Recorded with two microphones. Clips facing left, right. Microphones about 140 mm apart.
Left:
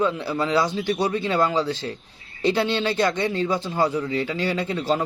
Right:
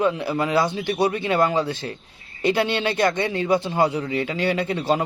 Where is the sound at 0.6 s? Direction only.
60° right (ahead or behind).